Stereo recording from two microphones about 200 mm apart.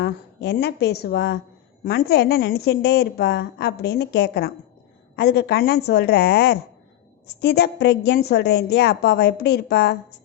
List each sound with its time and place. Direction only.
0.0 s a woman's voice: 55° left (ahead or behind)